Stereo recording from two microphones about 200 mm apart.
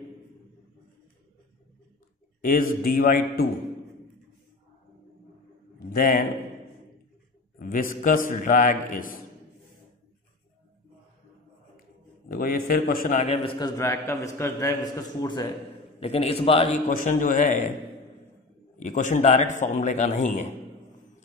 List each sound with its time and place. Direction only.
2.4 s a man's voice: 45° left (ahead or behind)
5.9 s a man's voice: 45° left (ahead or behind)
7.5 s a man's voice: 45° left (ahead or behind)
12.3 s a man's voice: 45° left (ahead or behind); by 16.6 s 30° left (ahead or behind)
16.9 s a man's voice: 40° left (ahead or behind)
18.8 s a man's voice: 40° left (ahead or behind)